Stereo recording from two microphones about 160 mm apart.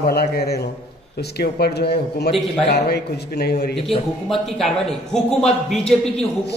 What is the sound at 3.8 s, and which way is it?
Speech, centre (ahead or behind).